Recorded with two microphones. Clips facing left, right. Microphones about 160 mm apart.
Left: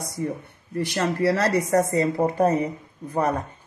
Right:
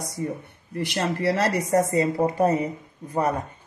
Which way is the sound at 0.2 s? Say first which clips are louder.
Left 2 dB; 15° right (ahead or behind).